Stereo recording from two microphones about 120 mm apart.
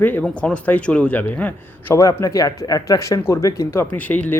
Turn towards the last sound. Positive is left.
turn(degrees=15)  # may be behind; listen again after turning